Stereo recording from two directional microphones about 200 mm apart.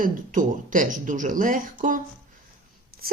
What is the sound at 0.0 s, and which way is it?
Speech, 40° right (ahead or behind).